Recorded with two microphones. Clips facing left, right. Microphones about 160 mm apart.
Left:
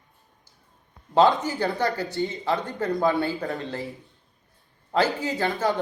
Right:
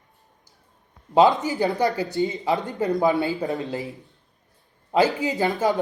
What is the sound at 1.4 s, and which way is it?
Speech, 20° right (ahead or behind).